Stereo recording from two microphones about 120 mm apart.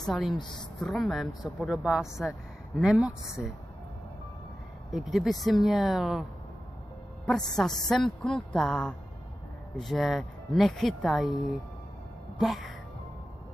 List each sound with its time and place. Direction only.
0.0 s speech: centre (ahead or behind)
4.9 s speech: 5° right (ahead or behind)
7.2 s speech: 5° left (ahead or behind)
12.4 s speech: centre (ahead or behind)